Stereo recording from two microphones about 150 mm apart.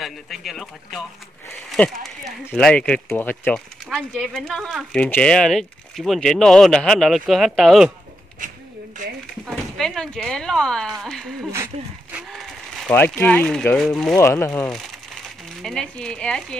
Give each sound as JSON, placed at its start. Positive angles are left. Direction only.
{"t": 0.0, "sound": "speech", "side_deg": 0}
{"t": 9.5, "sound": "speech", "side_deg": 0}
{"t": 11.5, "sound": "speech", "side_deg": -15}
{"t": 12.2, "sound": "a sound", "side_deg": 0}
{"t": 12.9, "sound": "speech", "side_deg": 15}
{"t": 14.1, "sound": "speech", "side_deg": 20}
{"t": 15.6, "sound": "speech", "side_deg": 5}